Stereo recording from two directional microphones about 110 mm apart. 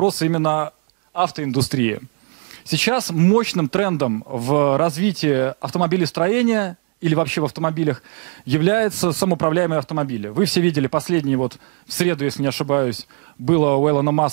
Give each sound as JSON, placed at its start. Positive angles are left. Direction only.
{"t": 0.0, "sound": "speech", "side_deg": -15}